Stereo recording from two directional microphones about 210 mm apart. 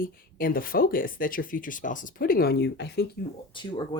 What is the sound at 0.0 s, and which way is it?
Speech, 45° left (ahead or behind).